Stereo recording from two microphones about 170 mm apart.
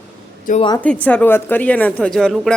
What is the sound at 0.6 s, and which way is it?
Speech, 25° left (ahead or behind).